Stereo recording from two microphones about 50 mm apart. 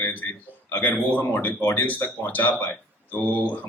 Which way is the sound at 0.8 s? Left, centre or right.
Left.